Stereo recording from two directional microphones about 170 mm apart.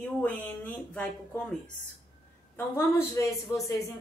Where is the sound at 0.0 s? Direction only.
10° left (ahead or behind).